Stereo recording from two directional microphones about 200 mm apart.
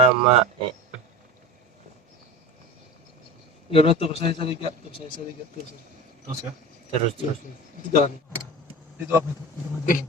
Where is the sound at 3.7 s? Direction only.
30° left (ahead or behind).